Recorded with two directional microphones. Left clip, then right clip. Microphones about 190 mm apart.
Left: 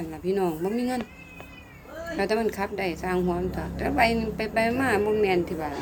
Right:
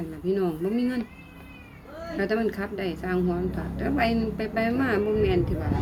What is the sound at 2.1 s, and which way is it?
A woman's voice, 15° right (ahead or behind).